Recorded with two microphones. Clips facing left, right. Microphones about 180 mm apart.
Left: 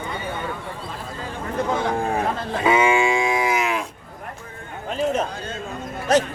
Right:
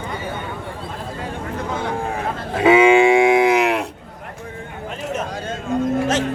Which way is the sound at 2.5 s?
70° right (ahead or behind).